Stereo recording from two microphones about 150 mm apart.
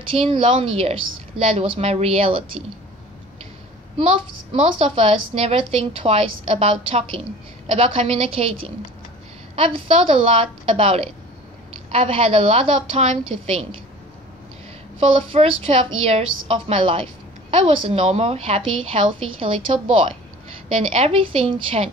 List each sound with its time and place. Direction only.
0.1 s a woman's voice: 35° right (ahead or behind)
4.0 s a woman's voice: 45° right (ahead or behind)
15.0 s a woman's voice: 40° right (ahead or behind)